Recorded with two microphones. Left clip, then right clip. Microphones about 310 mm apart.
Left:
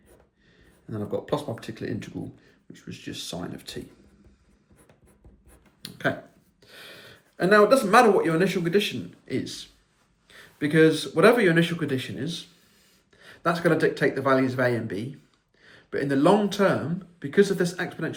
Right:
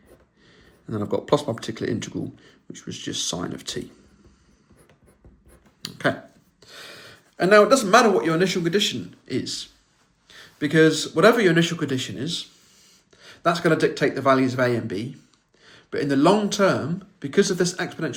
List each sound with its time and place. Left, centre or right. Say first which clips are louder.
0.5 s speech: right 5 dB; centre
5.8 s finger snapping: right 4 dB; centre
6.6 s speech: right 4 dB; centre